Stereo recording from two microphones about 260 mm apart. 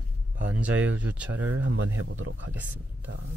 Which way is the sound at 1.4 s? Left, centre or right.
Right.